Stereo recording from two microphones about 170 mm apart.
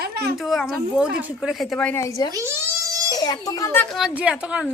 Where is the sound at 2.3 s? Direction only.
15° right (ahead or behind).